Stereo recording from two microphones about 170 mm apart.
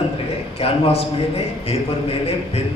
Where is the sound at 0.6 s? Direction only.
35° left (ahead or behind).